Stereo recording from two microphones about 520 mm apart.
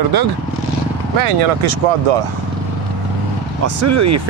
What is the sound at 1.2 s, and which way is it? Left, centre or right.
Speech, right.